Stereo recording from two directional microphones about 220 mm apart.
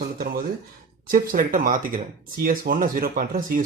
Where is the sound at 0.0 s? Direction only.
40° right (ahead or behind).